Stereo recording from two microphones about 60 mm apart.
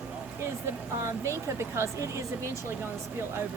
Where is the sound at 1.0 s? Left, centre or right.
Right.